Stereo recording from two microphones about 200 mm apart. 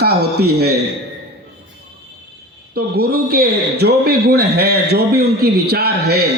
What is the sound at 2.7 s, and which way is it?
A man's voice, 50° right (ahead or behind).